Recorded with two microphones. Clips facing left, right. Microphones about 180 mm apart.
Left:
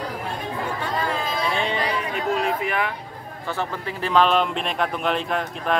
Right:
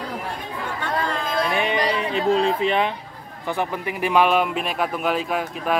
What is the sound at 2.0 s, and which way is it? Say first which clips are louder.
Speech: right 4 dB; 30° right (ahead or behind).